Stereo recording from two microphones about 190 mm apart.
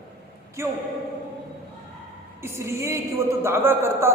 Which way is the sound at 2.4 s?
15° right (ahead or behind).